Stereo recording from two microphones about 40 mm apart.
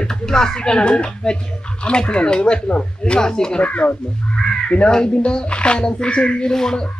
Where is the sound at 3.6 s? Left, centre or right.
Left.